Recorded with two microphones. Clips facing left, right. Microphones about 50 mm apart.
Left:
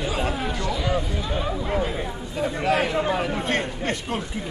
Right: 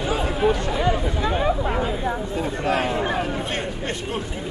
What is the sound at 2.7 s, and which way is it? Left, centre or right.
Chatter, right.